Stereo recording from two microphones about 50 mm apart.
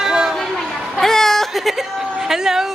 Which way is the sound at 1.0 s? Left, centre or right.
Centre.